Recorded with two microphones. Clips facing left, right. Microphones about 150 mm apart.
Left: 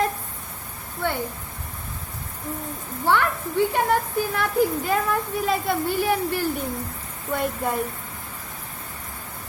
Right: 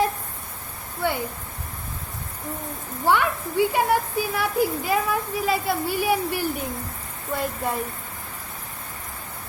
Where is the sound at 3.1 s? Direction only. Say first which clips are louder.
Even; 10° right (ahead or behind).